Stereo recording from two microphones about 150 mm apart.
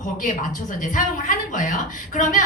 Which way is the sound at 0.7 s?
60° left (ahead or behind).